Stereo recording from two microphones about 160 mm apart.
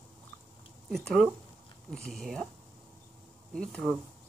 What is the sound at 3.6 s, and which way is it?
Speech, 5° left (ahead or behind).